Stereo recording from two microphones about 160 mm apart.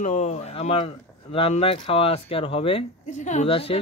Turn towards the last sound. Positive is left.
turn(degrees=35)  # may be behind; listen again after turning